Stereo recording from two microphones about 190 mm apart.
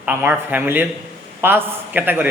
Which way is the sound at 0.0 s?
10° right (ahead or behind).